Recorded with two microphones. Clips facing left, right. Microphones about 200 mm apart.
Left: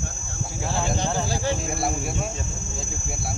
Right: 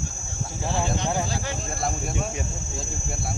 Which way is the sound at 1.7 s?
10° left (ahead or behind).